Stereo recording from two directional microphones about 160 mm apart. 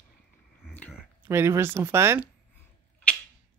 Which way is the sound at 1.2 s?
15° right (ahead or behind).